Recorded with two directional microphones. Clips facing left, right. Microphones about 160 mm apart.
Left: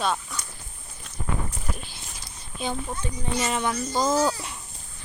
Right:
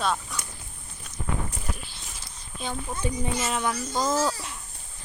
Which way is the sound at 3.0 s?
10° right (ahead or behind).